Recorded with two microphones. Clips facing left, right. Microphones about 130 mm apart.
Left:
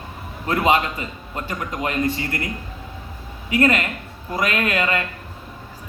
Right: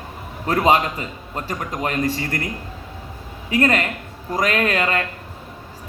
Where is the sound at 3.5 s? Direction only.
40° right (ahead or behind).